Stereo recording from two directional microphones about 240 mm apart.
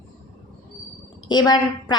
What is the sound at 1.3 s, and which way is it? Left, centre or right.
Speech, centre.